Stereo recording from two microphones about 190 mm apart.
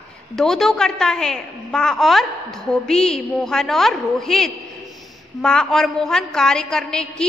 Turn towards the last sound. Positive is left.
turn(degrees=5)  # may be behind; listen again after turning